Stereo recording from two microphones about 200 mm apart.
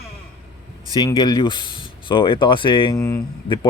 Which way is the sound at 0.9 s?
20° left (ahead or behind).